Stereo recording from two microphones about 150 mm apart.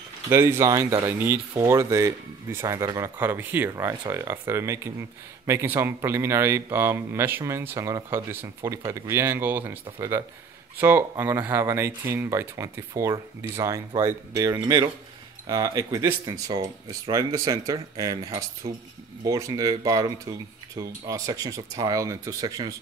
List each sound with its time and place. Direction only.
0.3 s speech: 15° right (ahead or behind)
18.6 s speech: 40° right (ahead or behind)
19.2 s speech: 25° right (ahead or behind)